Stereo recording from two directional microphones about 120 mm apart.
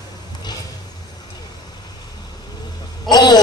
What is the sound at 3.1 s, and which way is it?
Speech, 35° left (ahead or behind).